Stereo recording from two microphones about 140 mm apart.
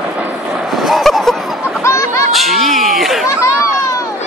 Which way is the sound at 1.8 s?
20° left (ahead or behind).